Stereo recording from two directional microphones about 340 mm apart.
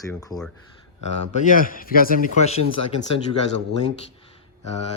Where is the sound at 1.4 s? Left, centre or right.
Left.